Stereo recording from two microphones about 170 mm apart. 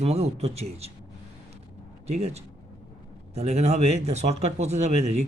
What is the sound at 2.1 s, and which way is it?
Speech, 40° right (ahead or behind).